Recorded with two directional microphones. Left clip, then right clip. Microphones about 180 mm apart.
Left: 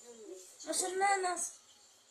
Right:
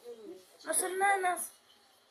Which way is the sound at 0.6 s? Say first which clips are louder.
Right 2 dB; 25° left (ahead or behind).